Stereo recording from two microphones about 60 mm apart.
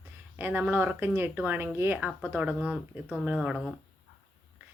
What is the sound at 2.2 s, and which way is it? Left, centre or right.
Speech, right.